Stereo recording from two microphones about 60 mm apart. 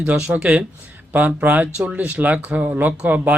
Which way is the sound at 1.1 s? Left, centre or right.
Right.